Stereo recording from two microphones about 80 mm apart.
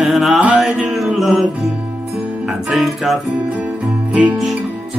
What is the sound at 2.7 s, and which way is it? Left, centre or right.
Music, centre.